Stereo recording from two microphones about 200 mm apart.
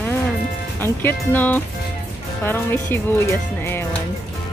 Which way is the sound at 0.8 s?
10° left (ahead or behind).